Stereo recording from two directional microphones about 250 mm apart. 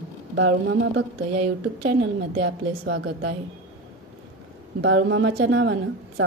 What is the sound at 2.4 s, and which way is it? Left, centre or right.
Speech, right.